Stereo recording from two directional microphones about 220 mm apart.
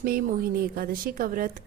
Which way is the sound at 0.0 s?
45° right (ahead or behind).